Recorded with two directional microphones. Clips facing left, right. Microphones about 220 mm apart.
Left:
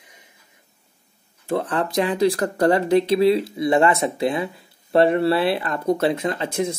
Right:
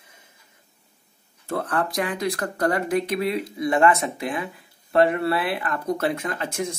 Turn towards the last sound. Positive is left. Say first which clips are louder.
# left 5 dB
turn(degrees=25)  # may be behind; listen again after turning